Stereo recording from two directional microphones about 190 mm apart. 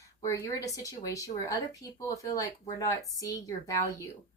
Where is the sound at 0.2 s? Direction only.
15° left (ahead or behind).